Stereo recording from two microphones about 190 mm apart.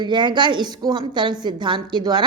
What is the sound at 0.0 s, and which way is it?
A woman's voice, 25° right (ahead or behind).